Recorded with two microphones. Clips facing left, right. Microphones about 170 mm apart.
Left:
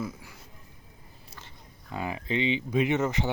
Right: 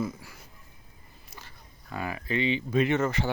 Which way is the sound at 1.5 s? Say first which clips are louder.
Left 1 dB; 20° left (ahead or behind).